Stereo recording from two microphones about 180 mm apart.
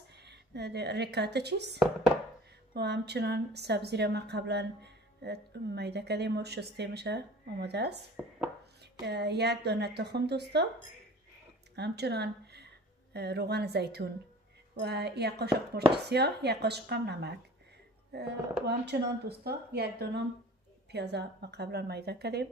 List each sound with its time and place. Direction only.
0.2 s a woman's voice: 70° right (ahead or behind)
9.0 s a woman's voice: 65° right (ahead or behind)
11.7 s a woman's voice: 65° right (ahead or behind)